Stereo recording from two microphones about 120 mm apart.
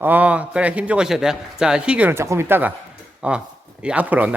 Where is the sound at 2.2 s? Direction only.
20° right (ahead or behind).